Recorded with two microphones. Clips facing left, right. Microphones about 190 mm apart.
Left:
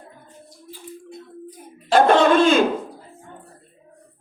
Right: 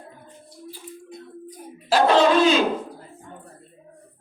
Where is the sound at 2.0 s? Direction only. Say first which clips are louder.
Left 2 dB; 50° left (ahead or behind).